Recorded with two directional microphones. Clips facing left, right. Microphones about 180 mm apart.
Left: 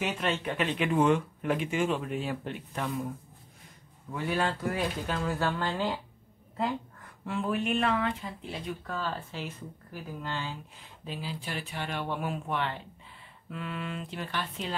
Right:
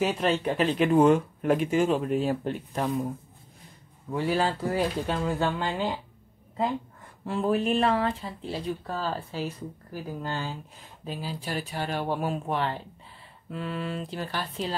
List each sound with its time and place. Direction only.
0.0 s speech: 35° right (ahead or behind)
4.1 s speech: 30° right (ahead or behind)
7.2 s speech: 35° right (ahead or behind)